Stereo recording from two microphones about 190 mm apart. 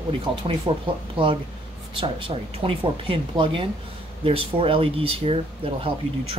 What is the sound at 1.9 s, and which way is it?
Speech, 25° right (ahead or behind).